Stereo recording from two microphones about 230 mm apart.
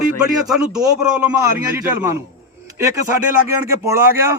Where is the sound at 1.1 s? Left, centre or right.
Centre.